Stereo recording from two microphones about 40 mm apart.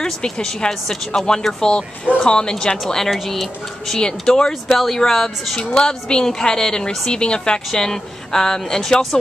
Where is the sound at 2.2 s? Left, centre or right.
Left.